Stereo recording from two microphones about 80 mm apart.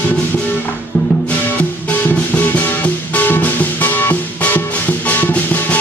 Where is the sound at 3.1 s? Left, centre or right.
Left.